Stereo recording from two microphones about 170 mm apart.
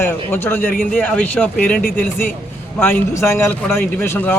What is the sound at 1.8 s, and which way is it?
Speech, 55° left (ahead or behind).